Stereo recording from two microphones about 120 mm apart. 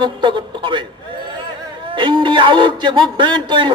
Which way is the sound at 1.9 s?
40° right (ahead or behind).